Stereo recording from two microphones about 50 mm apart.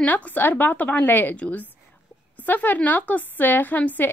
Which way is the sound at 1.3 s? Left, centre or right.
Left.